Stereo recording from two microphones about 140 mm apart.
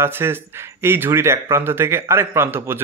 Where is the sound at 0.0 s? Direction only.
15° right (ahead or behind).